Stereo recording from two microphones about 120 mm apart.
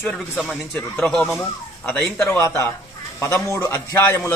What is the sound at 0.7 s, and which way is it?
Speech, 15° left (ahead or behind).